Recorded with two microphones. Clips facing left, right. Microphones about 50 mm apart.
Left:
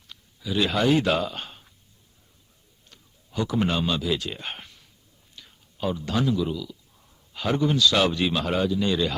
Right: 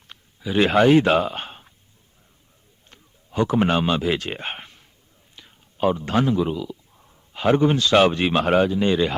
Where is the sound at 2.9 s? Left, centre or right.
Right.